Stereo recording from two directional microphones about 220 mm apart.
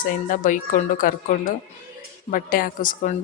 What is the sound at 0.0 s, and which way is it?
Speech, 35° left (ahead or behind).